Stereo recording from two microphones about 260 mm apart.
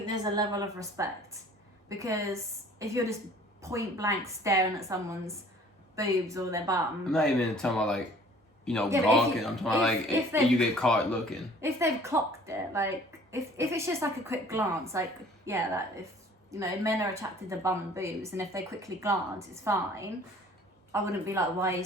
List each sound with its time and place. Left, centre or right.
0.0 s a woman's voice: centre
7.0 s a man's voice: centre
10.1 s a woman's voice: centre
10.5 s speech: centre
11.6 s a woman's voice: centre